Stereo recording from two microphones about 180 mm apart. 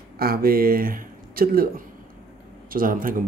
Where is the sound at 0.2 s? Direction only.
55° right (ahead or behind).